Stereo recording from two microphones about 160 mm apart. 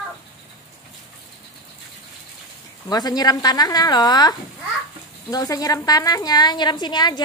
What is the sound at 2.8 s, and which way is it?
A woman's voice, 25° left (ahead or behind).